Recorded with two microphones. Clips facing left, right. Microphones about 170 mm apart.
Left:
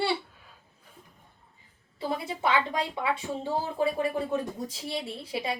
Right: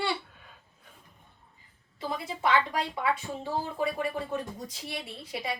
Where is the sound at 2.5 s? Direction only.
25° left (ahead or behind).